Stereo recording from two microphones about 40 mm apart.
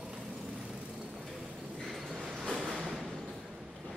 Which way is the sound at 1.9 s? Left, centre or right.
Centre.